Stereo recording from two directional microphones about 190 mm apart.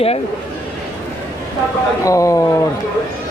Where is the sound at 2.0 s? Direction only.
15° left (ahead or behind).